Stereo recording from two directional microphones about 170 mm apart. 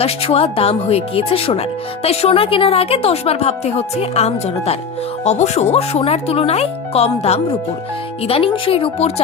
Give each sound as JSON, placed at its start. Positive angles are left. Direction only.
{"t": 0.0, "sound": "a woman's voice", "side_deg": 35}